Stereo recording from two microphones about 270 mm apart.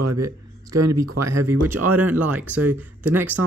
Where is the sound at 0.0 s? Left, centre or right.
Right.